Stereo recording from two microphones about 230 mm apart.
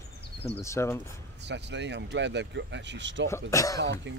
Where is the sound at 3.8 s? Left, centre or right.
Right.